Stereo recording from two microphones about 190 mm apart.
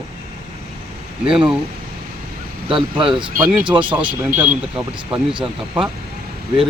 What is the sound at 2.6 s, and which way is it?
Speech, 25° right (ahead or behind).